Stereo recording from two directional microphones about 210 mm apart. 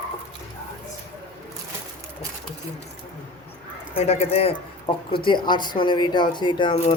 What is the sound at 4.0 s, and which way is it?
Speech, 30° left (ahead or behind).